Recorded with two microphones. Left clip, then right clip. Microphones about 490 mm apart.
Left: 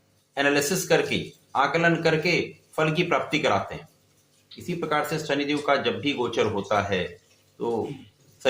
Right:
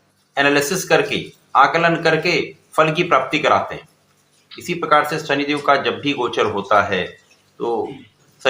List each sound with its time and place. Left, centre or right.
0.3 s a man's voice: left